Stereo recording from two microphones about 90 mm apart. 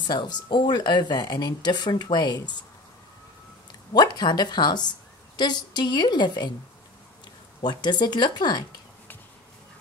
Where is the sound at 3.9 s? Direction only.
50° left (ahead or behind).